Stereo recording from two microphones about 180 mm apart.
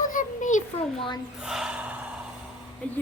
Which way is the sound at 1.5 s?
5° right (ahead or behind).